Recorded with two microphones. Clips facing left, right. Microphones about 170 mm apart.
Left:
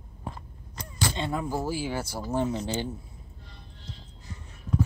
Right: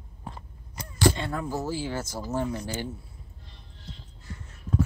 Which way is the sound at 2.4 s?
20° left (ahead or behind).